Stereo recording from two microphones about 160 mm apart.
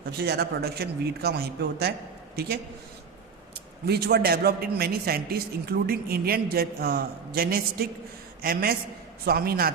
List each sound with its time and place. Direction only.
0.0 s speech: 85° right
2.3 s a man's voice: 80° right
3.8 s a man's voice: 80° right